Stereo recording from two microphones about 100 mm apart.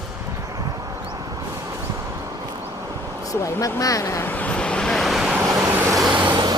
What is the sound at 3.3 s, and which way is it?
Speech, 35° left (ahead or behind).